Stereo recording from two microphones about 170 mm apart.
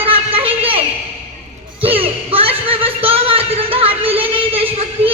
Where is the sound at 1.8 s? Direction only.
35° right (ahead or behind).